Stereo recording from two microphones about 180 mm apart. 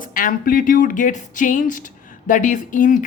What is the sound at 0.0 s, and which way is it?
Speech, 50° left (ahead or behind).